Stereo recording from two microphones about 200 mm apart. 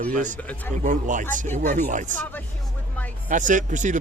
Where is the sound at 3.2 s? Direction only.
40° right (ahead or behind).